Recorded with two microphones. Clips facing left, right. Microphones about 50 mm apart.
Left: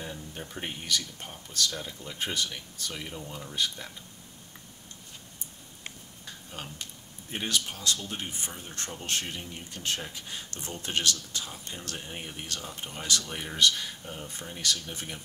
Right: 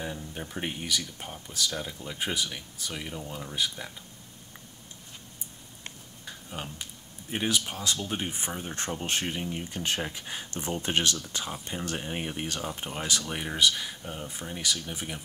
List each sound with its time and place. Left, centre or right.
0.0 s speech: centre
6.5 s speech: centre